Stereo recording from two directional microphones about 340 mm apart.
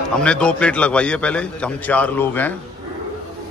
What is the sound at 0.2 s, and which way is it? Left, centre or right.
Speech, centre.